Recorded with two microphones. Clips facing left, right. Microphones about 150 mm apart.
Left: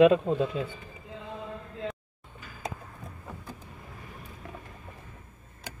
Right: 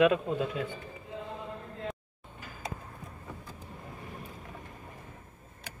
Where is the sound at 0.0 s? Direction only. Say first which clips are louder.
Left 5 dB; 30° left (ahead or behind).